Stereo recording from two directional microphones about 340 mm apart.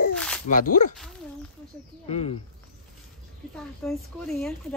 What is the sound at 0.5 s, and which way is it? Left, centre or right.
Speech, left.